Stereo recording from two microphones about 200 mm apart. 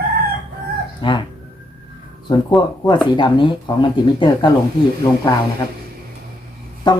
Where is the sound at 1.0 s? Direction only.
25° left (ahead or behind).